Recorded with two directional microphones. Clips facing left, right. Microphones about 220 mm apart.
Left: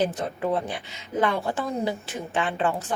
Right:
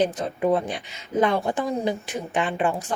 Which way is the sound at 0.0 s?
20° right (ahead or behind).